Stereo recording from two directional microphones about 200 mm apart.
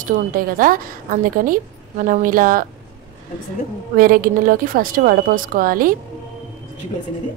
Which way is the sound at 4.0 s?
45° right (ahead or behind).